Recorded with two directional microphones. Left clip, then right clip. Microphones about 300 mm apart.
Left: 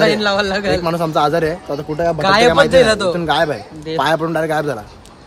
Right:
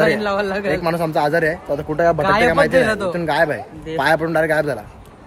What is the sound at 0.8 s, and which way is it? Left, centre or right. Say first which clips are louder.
A man's voice: left 2 dB; centre.